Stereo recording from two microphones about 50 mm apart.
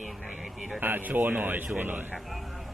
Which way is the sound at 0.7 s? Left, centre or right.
Right.